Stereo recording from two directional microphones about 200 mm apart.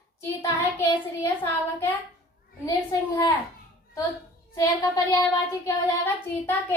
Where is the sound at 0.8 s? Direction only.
15° left (ahead or behind).